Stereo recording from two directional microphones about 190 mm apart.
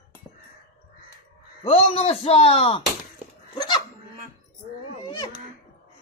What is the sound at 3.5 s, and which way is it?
Goat, 20° left (ahead or behind).